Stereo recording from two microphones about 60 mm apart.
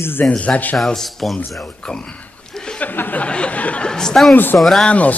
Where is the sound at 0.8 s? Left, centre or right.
Centre.